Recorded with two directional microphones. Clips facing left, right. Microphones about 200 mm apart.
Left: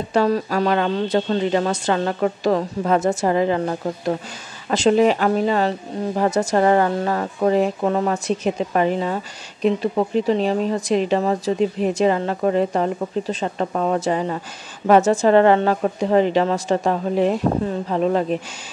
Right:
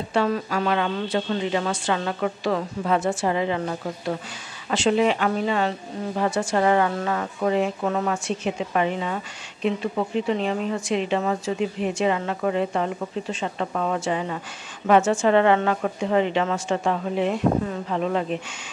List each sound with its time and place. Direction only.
0.1 s a woman's voice: 40° left (ahead or behind)